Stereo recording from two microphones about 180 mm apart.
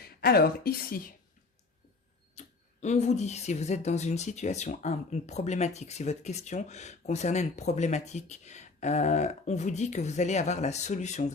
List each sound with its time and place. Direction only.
0.0 s a woman's voice: 60° left (ahead or behind)
2.3 s speech: 40° left (ahead or behind)